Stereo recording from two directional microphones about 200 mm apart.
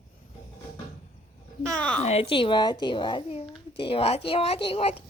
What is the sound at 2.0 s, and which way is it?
Speech, 30° left (ahead or behind).